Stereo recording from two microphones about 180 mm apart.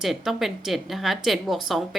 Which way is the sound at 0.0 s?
Centre (ahead or behind).